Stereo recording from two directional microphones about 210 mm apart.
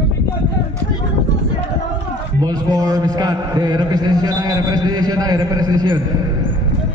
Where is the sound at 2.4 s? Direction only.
15° right (ahead or behind).